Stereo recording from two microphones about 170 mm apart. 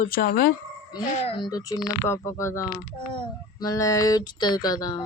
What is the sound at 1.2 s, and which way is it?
Speech, 30° left (ahead or behind).